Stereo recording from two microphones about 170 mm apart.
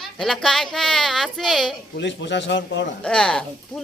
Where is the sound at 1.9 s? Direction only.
90° left.